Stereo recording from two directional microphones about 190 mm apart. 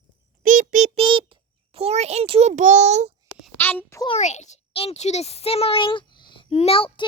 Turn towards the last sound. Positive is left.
turn(degrees=30)  # may be behind; listen again after turning